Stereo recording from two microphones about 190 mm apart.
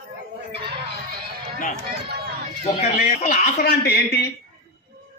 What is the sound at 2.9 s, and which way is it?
Speech, 50° left (ahead or behind).